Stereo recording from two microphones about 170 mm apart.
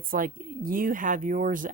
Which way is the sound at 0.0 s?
55° right (ahead or behind).